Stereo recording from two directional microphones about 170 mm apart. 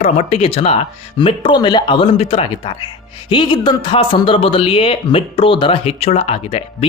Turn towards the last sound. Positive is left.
turn(degrees=35)  # may be behind; listen again after turning